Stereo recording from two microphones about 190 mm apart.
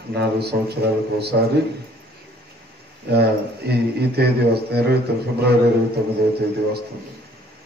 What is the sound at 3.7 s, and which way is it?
Speech, 60° right (ahead or behind).